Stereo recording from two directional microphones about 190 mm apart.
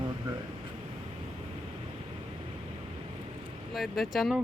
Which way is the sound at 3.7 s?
Centre (ahead or behind).